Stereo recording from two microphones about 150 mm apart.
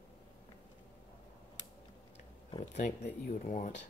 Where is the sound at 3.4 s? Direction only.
55° left (ahead or behind).